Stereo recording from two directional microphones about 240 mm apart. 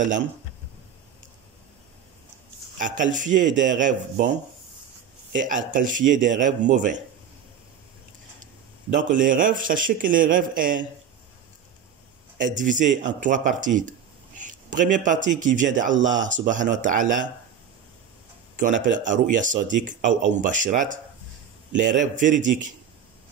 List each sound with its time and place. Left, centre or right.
0.0 s speech: right
2.8 s speech: right
5.3 s speech: right
8.9 s speech: right
12.4 s speech: right
18.6 s speech: right
22.0 s speech: right